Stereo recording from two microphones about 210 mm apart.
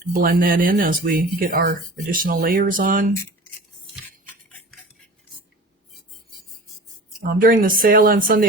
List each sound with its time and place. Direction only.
0.1 s speech: 40° right (ahead or behind)
7.2 s speech: 45° right (ahead or behind)